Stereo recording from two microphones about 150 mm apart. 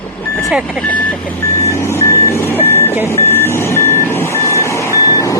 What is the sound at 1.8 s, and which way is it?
Reversing beeps, 15° left (ahead or behind).